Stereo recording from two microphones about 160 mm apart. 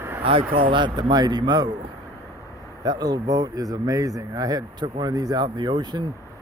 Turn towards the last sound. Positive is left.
turn(degrees=-30)  # may be behind; listen again after turning